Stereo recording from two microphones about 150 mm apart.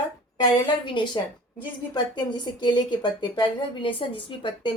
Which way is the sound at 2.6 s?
30° left (ahead or behind).